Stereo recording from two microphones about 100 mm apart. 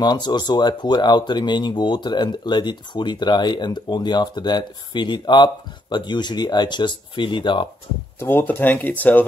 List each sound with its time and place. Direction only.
0.0 s speech: 45° left (ahead or behind)
8.2 s speech: 20° left (ahead or behind)